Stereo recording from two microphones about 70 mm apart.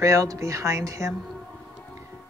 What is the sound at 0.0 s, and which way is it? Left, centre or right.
Speech, right.